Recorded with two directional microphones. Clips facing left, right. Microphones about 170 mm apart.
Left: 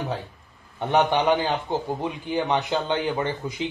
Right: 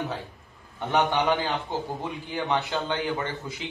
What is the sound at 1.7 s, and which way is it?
A man's voice, 20° left (ahead or behind).